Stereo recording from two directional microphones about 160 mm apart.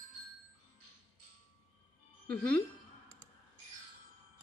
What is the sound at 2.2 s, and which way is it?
Speech, 70° right (ahead or behind).